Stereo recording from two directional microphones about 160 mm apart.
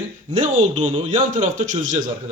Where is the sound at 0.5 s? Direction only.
50° right (ahead or behind).